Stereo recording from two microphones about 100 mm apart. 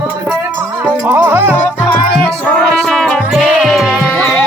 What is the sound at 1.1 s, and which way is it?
Music, 25° right (ahead or behind).